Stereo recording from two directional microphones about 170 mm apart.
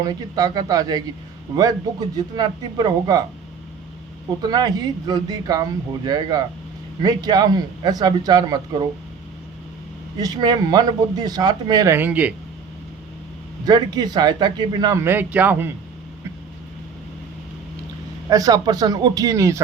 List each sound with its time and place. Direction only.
0.0 s speech: 20° right (ahead or behind)
4.4 s speech: 25° right (ahead or behind)
10.2 s speech: 20° right (ahead or behind)
13.7 s speech: 25° right (ahead or behind)
18.3 s speech: 20° right (ahead or behind)